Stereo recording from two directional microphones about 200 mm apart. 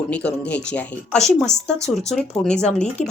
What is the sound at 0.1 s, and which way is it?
Speech, 5° left (ahead or behind).